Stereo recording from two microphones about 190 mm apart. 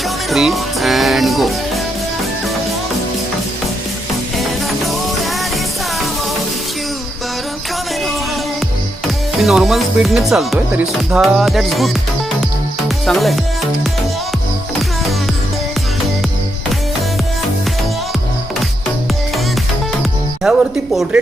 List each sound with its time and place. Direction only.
0.3 s music: centre (ahead or behind)
9.4 s speech: centre (ahead or behind)
13.1 s speech: centre (ahead or behind)
20.0 s music: centre (ahead or behind)